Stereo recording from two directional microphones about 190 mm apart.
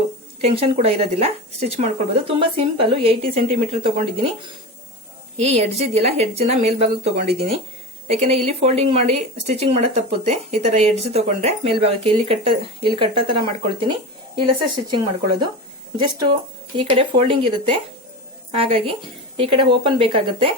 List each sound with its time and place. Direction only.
0.4 s speech: 30° right (ahead or behind)
5.4 s speech: 35° right (ahead or behind)